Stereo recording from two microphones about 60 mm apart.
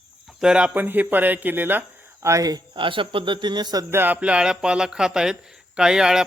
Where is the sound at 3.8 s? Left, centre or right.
Right.